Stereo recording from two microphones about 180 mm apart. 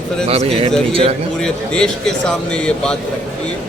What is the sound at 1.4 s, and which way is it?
Speech, 5° left (ahead or behind).